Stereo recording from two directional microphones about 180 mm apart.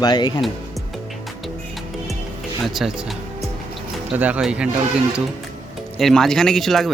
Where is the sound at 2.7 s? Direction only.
Centre (ahead or behind).